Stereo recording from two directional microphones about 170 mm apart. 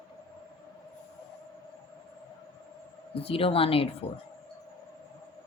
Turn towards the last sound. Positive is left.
turn(degrees=35)  # may be behind; listen again after turning